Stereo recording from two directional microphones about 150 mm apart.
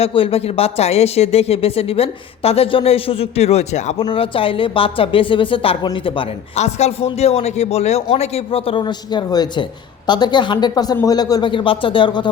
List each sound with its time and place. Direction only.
0.0 s speech: 40° left (ahead or behind)
4.0 s speech: 35° left (ahead or behind)
6.6 s a man's voice: 50° left (ahead or behind); by 12.3 s 30° left (ahead or behind)